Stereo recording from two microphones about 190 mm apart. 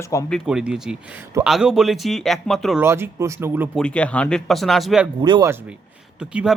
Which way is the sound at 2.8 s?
15° right (ahead or behind).